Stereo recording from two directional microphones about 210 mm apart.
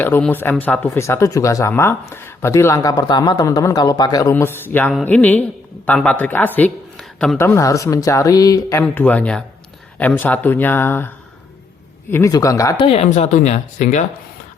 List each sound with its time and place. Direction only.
0.0 s speech: 10° left (ahead or behind)
12.1 s speech: 15° left (ahead or behind); by 14.0 s 35° left (ahead or behind)